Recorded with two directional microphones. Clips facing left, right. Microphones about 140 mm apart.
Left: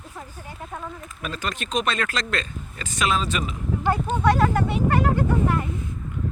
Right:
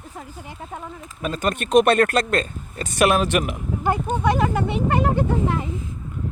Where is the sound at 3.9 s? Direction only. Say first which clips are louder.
Even; 20° right (ahead or behind).